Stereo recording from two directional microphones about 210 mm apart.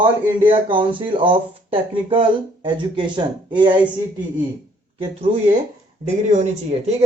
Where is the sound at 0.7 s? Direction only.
25° right (ahead or behind).